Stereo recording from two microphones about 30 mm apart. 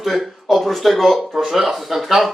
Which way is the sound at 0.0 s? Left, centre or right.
Centre.